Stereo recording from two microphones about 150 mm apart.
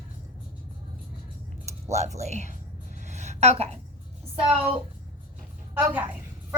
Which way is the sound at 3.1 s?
50° right (ahead or behind).